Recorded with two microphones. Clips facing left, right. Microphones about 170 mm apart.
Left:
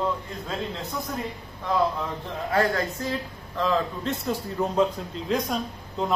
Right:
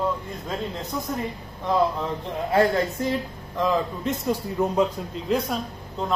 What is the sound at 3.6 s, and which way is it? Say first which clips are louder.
A man's voice: right 1 dB; 15° right (ahead or behind).